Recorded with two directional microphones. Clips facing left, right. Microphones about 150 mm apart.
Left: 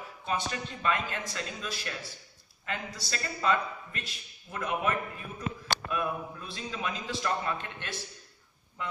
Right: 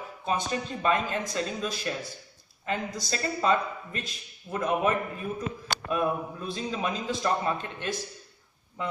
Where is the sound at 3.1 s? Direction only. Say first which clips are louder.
Right 3 dB; 30° right (ahead or behind).